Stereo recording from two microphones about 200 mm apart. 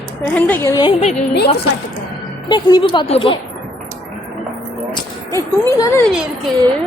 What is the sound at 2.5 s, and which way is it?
Speech, 20° left (ahead or behind).